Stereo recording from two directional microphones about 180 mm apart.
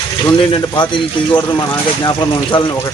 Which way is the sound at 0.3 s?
25° left (ahead or behind).